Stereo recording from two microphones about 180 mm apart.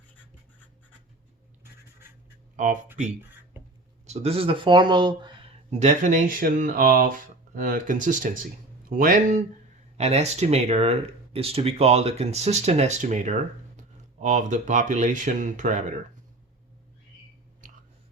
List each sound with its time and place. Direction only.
2.6 s speech: 45° right (ahead or behind)
3.6 s a sound: 10° right (ahead or behind)
4.0 s speech: 35° right (ahead or behind)
5.7 s speech: 40° right (ahead or behind)
10.0 s speech: 35° right (ahead or behind)
17.6 s chewing: 45° right (ahead or behind)